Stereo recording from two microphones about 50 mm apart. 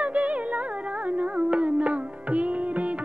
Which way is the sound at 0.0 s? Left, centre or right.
Right.